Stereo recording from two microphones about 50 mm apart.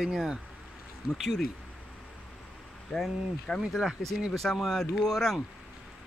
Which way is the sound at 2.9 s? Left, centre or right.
Centre.